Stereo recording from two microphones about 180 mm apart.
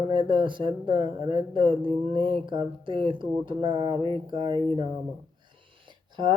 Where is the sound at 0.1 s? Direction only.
25° right (ahead or behind).